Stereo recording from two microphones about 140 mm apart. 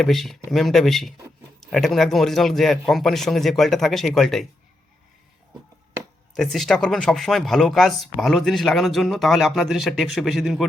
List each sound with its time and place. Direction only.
0.0 s speech: centre (ahead or behind)
6.3 s speech: centre (ahead or behind)